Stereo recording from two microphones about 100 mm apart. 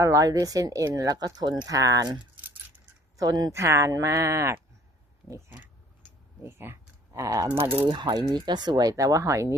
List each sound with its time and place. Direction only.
0.0 s speech: 35° right (ahead or behind)
2.3 s keys jangling: 15° right (ahead or behind)
3.2 s speech: 40° right (ahead or behind)
6.1 s typing: 25° right (ahead or behind)
7.6 s speech: 15° right (ahead or behind)
7.9 s speech: 50° right (ahead or behind); by 9.6 s 30° right (ahead or behind)